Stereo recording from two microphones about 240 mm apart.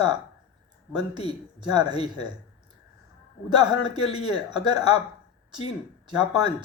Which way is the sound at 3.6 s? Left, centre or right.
Centre.